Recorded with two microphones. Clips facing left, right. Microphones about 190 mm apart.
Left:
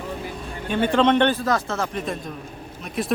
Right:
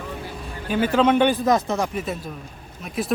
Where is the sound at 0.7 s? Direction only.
5° right (ahead or behind).